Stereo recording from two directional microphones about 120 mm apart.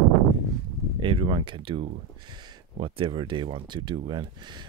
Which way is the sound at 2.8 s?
45° right (ahead or behind).